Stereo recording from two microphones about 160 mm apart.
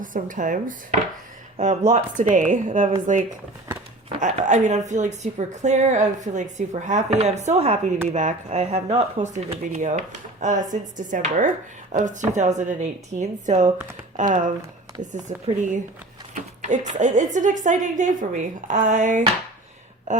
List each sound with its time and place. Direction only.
0.0 s speech: 55° right (ahead or behind)
4.2 s speech: 45° right (ahead or behind)